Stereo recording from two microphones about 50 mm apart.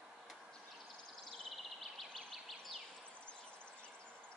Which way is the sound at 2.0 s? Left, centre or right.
Centre.